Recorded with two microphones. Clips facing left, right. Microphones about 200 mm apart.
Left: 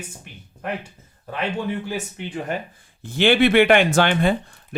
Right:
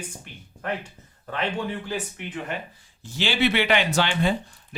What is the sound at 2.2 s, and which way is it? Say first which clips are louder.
Speech: left 4 dB; 30° left (ahead or behind).